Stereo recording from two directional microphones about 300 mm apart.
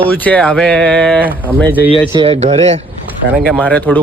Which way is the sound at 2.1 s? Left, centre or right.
Centre.